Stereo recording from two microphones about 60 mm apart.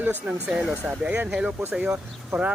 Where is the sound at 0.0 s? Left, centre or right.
Right.